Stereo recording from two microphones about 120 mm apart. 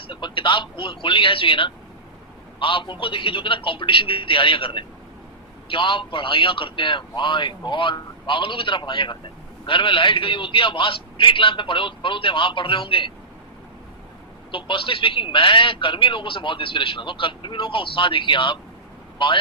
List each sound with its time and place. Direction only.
0.1 s a man's voice: 40° left (ahead or behind)
14.5 s a man's voice: 45° left (ahead or behind)